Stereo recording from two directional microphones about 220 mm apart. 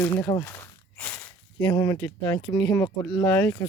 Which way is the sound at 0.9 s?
10° left (ahead or behind).